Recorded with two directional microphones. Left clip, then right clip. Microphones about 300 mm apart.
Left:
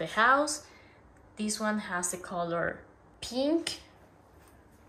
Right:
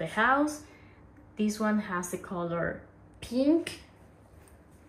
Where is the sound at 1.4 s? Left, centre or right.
Centre.